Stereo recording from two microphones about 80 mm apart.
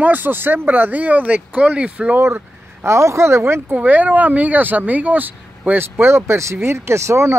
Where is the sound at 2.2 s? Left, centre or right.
Right.